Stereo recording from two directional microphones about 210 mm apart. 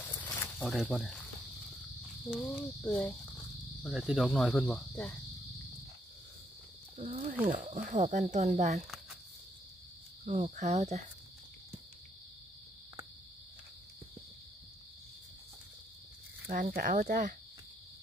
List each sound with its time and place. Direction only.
0.2 s cricket: 5° left (ahead or behind)
2.2 s cricket: centre (ahead or behind)
7.0 s speech: 40° right (ahead or behind)
10.2 s speech: 30° right (ahead or behind)
16.4 s speech: 40° right (ahead or behind)